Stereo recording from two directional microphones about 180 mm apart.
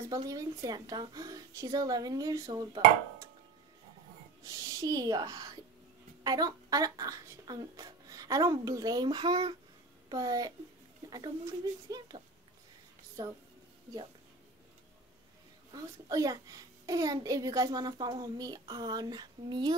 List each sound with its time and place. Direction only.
0.1 s a child's voice: 20° right (ahead or behind)
4.5 s a child's voice: 15° right (ahead or behind)
13.2 s a child's voice: 20° right (ahead or behind)
15.7 s a child's voice: 20° right (ahead or behind)